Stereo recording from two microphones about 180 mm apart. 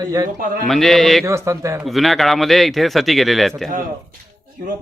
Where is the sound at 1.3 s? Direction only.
15° right (ahead or behind).